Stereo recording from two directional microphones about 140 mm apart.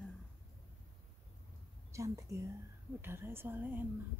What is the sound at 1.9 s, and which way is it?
A woman's voice, 20° right (ahead or behind).